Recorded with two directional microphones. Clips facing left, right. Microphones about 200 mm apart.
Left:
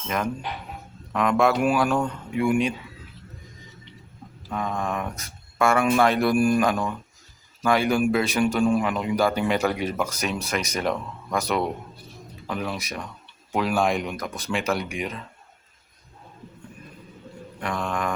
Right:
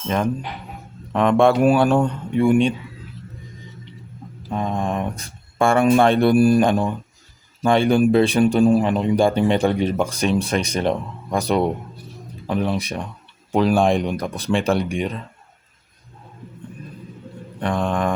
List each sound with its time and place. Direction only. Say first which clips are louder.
1.1 s speech: right 5 dB; 30° right (ahead or behind)
4.4 s speech: right 4 dB; 30° right (ahead or behind)
17.6 s speech: right 6 dB; 30° right (ahead or behind)